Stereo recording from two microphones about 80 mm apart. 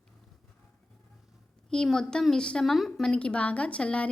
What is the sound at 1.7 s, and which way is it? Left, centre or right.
A woman's voice, centre.